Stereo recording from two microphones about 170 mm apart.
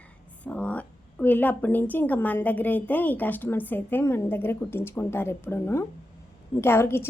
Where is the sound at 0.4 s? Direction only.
10° left (ahead or behind).